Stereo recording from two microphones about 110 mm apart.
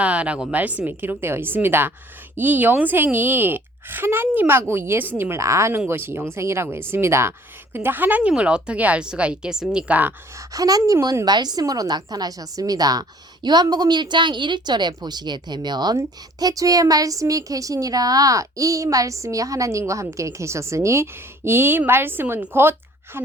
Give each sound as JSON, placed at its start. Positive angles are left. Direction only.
{"t": 0.0, "sound": "a woman's voice", "side_deg": -10}
{"t": 10.3, "sound": "a woman's voice", "side_deg": -30}